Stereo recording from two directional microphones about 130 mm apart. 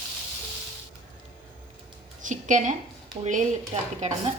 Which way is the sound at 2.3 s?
75° right (ahead or behind).